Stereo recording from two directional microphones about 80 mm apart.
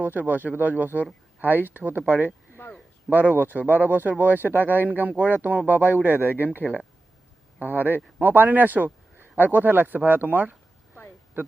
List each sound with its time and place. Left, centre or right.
0.0 s speech: right
2.5 s a sound: left
3.1 s speech: right